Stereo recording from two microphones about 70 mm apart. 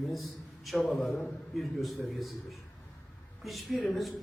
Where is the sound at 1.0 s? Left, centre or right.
Centre.